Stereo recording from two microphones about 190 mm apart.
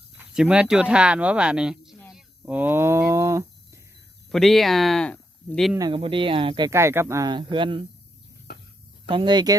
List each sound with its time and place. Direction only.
0.2 s speech: 5° right (ahead or behind)
2.0 s hum: 5° left (ahead or behind)
2.4 s a sound: 10° right (ahead or behind)
4.3 s speech: centre (ahead or behind)
5.7 s speech: 25° right (ahead or behind)
6.7 s speech: 15° right (ahead or behind)
9.0 s speech: 25° right (ahead or behind)